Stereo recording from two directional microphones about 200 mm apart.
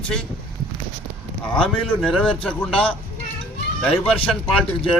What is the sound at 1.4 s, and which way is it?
A man's voice, 5° left (ahead or behind).